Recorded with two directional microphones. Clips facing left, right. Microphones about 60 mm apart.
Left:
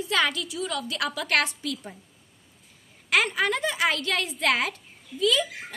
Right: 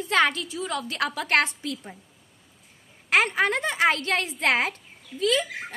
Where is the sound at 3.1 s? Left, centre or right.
Right.